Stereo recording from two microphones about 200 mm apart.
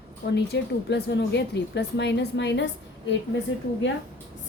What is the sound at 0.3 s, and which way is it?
A woman's voice, 55° left (ahead or behind).